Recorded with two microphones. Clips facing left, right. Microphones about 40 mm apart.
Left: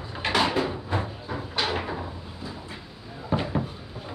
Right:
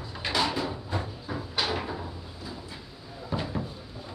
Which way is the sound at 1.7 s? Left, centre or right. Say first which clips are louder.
Left 3 dB; left.